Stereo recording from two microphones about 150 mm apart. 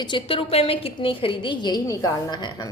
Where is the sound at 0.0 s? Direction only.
35° left (ahead or behind).